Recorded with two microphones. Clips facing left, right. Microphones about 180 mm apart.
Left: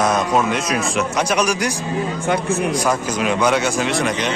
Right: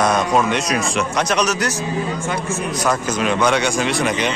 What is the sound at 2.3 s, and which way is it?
Speech, 60° left (ahead or behind).